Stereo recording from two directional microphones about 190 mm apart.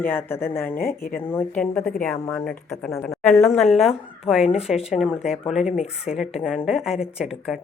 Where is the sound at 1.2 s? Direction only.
10° left (ahead or behind).